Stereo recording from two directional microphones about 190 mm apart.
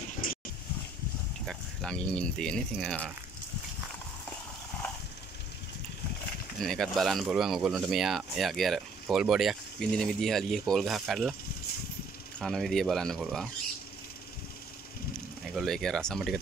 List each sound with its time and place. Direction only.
0.2 s a sound: 45° left (ahead or behind)
1.4 s speech: centre (ahead or behind)
6.6 s speech: centre (ahead or behind)
12.4 s speech: centre (ahead or behind)
15.5 s speech: centre (ahead or behind)